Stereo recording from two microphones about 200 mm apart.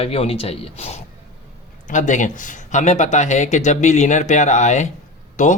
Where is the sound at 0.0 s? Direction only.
30° left (ahead or behind).